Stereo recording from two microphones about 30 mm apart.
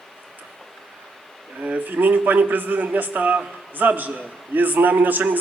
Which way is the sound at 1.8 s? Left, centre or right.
Right.